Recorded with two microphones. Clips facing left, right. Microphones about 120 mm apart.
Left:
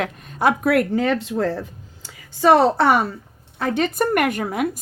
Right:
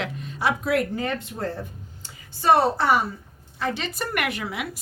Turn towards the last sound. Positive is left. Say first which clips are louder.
# left 8 dB
turn(degrees=45)  # may be behind; listen again after turning